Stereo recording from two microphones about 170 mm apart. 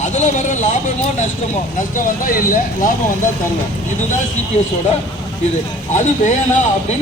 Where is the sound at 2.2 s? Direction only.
55° left (ahead or behind).